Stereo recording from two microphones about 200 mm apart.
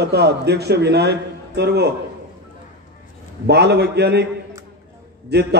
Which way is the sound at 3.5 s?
55° right (ahead or behind).